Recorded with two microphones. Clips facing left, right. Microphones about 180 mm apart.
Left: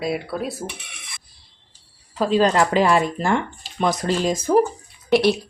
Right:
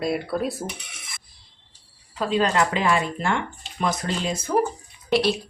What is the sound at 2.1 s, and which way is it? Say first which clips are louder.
Speech: left 4 dB; 40° left (ahead or behind).